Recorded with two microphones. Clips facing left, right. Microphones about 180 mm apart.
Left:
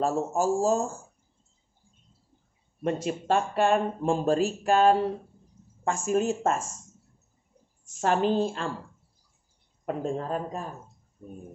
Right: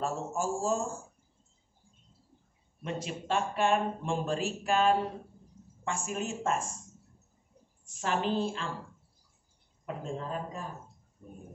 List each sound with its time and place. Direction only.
0.0 s speech: 40° left (ahead or behind)
2.8 s speech: 45° left (ahead or behind)
8.0 s speech: 45° left (ahead or behind)
9.8 s speech: 45° left (ahead or behind)